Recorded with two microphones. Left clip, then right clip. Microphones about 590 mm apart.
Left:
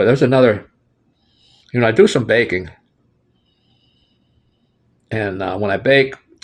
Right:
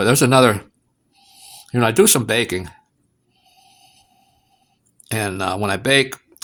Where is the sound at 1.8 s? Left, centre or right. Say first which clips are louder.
Left 3 dB; right.